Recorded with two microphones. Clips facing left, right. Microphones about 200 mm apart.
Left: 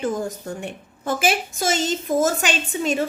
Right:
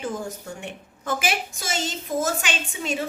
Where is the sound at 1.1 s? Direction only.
30° left (ahead or behind).